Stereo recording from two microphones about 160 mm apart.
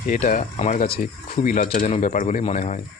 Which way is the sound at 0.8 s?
65° left (ahead or behind).